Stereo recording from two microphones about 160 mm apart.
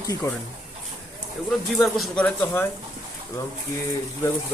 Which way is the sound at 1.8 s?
Centre (ahead or behind).